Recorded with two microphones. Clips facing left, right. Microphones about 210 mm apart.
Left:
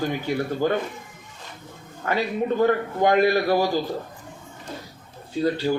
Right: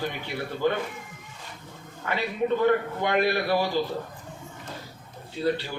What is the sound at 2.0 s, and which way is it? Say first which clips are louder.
A man's voice: left 3 dB; 45° left (ahead or behind).